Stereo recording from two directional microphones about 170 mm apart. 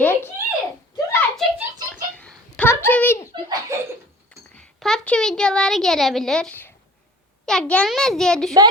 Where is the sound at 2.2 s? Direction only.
5° left (ahead or behind).